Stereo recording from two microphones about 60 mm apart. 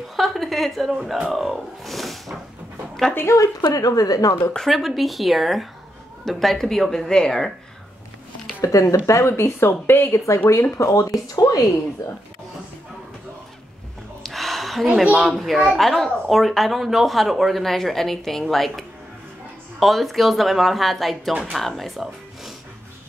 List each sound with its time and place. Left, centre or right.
0.1 s speech: centre
3.3 s a woman's voice: left
4.6 s speech: centre
8.6 s speech: left
10.1 s speech: left
11.3 s a woman's voice: left
14.2 s a sound: centre
15.0 s speech: centre